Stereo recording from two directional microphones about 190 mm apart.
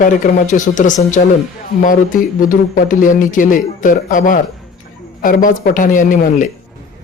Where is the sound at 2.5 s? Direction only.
45° left (ahead or behind).